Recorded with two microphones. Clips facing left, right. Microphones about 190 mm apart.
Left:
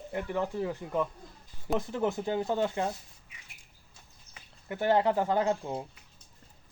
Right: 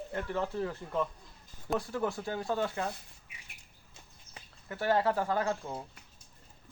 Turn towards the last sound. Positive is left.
turn(degrees=20)  # may be behind; listen again after turning